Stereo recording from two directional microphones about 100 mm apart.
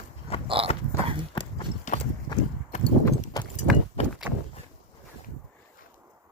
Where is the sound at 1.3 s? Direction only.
55° left (ahead or behind).